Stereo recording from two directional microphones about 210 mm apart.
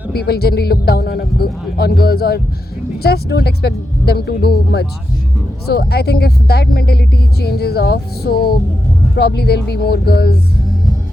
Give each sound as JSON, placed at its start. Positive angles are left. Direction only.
{"t": 0.1, "sound": "speech", "side_deg": 50}